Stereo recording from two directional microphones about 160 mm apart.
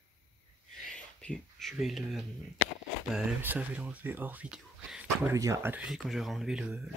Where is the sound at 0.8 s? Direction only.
5° left (ahead or behind).